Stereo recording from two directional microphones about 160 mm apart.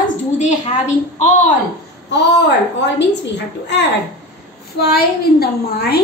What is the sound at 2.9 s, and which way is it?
Speech, 90° left.